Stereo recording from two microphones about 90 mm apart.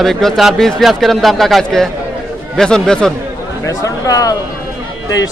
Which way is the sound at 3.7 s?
40° left (ahead or behind).